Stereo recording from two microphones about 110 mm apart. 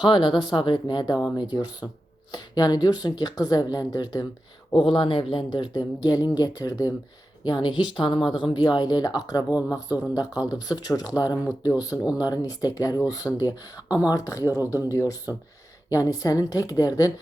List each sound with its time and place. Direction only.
0.0 s speech: 45° left (ahead or behind)
4.8 s speech: 50° left (ahead or behind)